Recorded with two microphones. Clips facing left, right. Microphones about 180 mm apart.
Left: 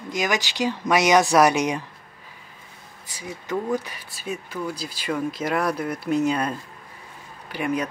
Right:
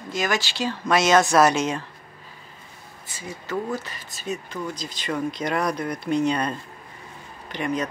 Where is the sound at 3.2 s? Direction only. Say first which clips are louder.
Left 1 dB; 15° left (ahead or behind).